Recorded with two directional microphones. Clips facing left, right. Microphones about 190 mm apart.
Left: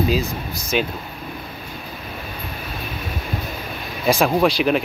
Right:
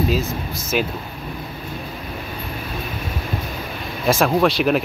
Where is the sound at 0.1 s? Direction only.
Centre (ahead or behind).